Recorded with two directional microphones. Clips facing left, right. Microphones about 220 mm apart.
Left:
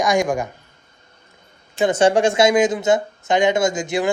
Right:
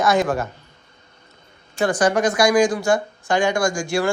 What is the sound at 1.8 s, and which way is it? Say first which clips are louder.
Speech: left 3 dB; 25° left (ahead or behind).